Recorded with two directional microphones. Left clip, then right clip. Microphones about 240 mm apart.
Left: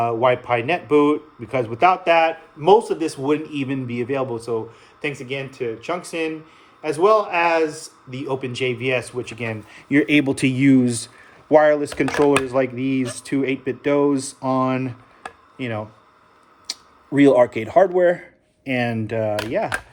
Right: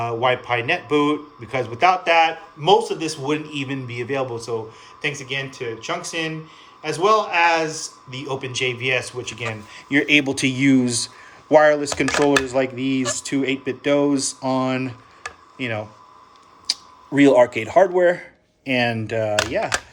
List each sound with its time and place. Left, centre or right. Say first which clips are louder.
0.0 s a man's voice: left 2 dB; centre